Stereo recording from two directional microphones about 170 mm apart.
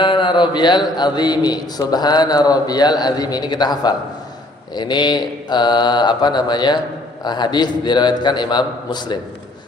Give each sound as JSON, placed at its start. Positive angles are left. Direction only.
{"t": 0.0, "sound": "a man's voice", "side_deg": 30}